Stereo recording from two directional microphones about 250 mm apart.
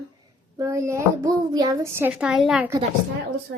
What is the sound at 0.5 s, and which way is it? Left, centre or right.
A child's voice, centre.